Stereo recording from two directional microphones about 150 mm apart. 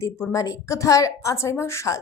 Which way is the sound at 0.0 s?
15° left (ahead or behind).